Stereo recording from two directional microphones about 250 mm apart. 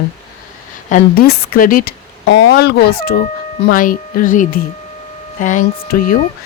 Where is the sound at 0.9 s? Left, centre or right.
Left.